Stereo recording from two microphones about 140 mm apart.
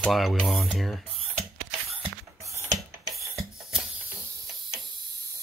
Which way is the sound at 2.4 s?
25° right (ahead or behind).